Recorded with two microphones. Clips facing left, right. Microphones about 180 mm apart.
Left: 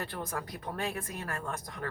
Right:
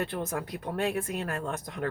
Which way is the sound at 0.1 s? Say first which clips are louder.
Right 5 dB; 25° right (ahead or behind).